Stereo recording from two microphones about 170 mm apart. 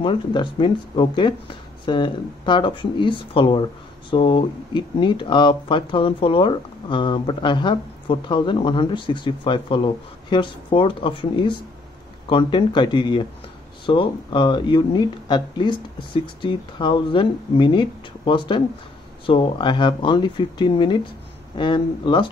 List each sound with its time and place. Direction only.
0.0 s speech: 30° left (ahead or behind)